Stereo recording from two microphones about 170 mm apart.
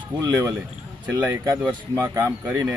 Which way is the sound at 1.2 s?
15° right (ahead or behind).